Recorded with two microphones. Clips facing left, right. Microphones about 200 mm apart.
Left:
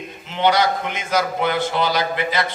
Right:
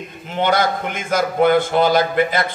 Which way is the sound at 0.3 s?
50° right (ahead or behind).